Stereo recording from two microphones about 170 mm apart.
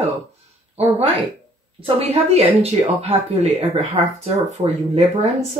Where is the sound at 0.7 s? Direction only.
35° right (ahead or behind).